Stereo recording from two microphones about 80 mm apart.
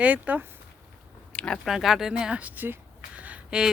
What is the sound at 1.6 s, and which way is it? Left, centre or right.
Speech, centre.